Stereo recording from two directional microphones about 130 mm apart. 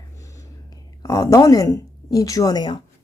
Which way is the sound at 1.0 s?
25° left (ahead or behind).